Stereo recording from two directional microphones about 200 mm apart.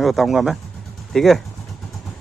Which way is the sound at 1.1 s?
Centre (ahead or behind).